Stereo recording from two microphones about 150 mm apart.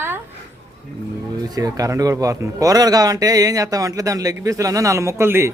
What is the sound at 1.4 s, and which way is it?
Speech, 25° right (ahead or behind).